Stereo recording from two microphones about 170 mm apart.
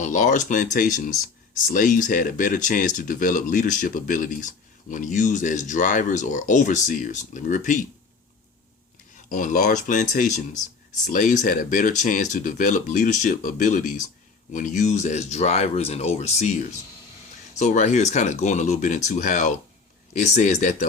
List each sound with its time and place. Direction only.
0.0 s speech: 45° left (ahead or behind)
9.3 s speech: 50° left (ahead or behind)